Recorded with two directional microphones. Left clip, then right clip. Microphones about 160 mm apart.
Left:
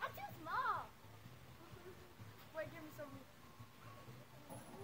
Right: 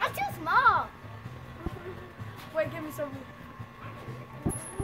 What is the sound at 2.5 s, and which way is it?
Speech, 10° left (ahead or behind).